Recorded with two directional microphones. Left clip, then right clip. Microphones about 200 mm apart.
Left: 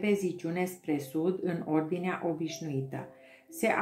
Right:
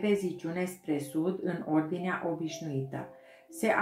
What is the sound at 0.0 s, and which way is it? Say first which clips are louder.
Speech: even; 25° left (ahead or behind).